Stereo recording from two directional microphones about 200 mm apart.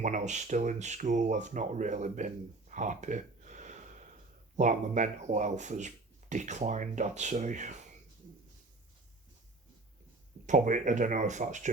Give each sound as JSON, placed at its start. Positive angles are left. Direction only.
{"t": 0.0, "sound": "speech", "side_deg": -40}
{"t": 10.4, "sound": "speech", "side_deg": -40}